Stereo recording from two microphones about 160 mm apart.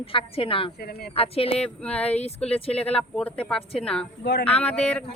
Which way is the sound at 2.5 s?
40° left (ahead or behind).